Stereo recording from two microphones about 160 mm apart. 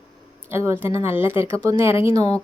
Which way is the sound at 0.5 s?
15° right (ahead or behind).